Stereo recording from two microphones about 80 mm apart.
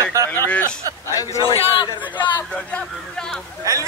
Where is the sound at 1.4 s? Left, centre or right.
Left.